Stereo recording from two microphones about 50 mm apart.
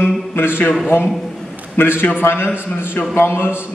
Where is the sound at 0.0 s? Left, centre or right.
Left.